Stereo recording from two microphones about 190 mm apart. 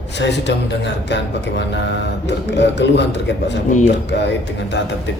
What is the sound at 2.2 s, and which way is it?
Speech, 65° left (ahead or behind).